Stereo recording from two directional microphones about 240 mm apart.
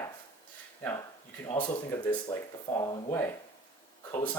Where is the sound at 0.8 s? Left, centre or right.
Centre.